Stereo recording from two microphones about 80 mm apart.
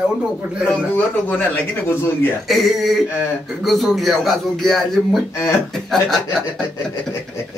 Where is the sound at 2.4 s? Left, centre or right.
Centre.